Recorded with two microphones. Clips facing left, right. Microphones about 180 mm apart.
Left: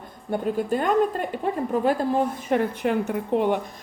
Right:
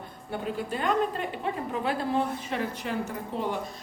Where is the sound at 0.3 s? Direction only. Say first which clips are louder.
Left 8 dB; 45° left (ahead or behind); by 3.6 s 65° left (ahead or behind).